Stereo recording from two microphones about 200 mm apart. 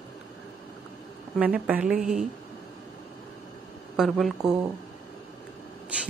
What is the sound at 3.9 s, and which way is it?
Speech, centre (ahead or behind).